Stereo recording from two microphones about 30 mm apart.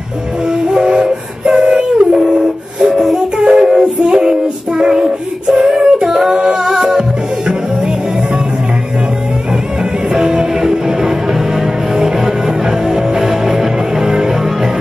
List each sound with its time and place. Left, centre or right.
0.7 s music: right
1.0 s train: right
1.7 s music: right
2.8 s music: centre
3.3 s music: right
3.8 s child singing: right
6.0 s singing: centre
6.3 s a capella: right
6.7 s music: centre
10.1 s music: centre
13.9 s music: centre